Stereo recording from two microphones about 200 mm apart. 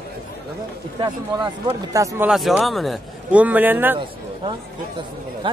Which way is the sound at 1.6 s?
15° right (ahead or behind).